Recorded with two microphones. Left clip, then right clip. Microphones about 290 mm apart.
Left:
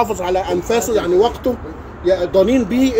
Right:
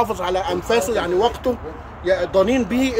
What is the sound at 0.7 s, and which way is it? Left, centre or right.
Speech, centre.